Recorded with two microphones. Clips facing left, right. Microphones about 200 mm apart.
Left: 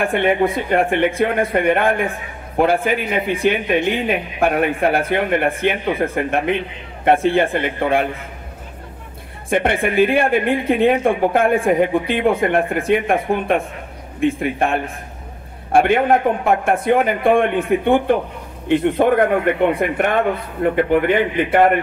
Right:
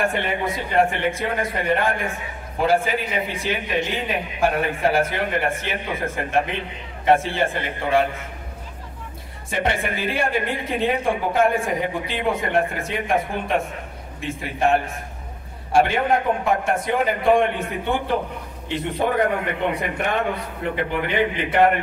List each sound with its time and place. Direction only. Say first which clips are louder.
0.0 s speech: left 7 dB; 55° left (ahead or behind)
9.5 s a man's voice: left 6 dB; 55° left (ahead or behind)